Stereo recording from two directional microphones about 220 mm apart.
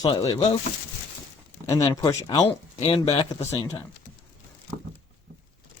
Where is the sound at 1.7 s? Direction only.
15° left (ahead or behind).